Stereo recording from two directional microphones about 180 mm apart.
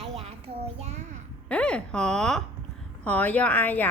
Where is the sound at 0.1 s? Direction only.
35° right (ahead or behind).